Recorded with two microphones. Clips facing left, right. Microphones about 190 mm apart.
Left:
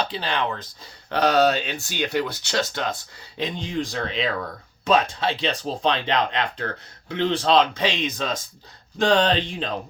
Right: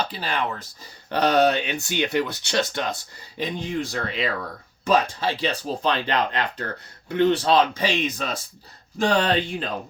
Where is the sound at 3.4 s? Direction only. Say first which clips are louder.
Even; 5° right (ahead or behind).